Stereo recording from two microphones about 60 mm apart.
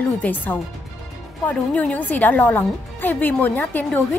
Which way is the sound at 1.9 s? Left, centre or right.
Left.